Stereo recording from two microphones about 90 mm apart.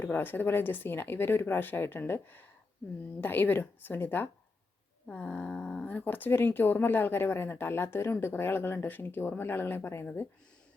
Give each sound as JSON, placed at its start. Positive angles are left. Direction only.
{"t": 0.0, "sound": "speech", "side_deg": 20}